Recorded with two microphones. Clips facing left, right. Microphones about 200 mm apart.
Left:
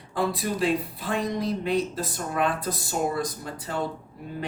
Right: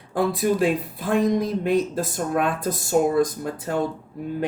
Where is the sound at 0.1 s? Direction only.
50° right (ahead or behind).